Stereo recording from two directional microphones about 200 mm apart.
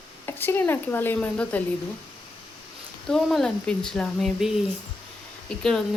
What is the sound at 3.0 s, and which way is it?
Speech, centre (ahead or behind).